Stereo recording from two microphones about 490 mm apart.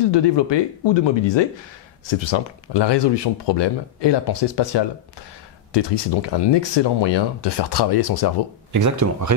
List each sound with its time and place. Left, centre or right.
0.0 s speech: left
8.7 s speech: right